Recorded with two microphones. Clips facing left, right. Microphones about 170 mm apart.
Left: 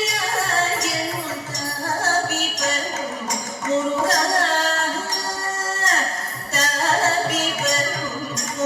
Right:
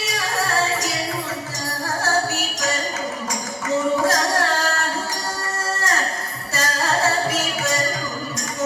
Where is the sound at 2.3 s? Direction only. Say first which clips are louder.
Even; 20° left (ahead or behind).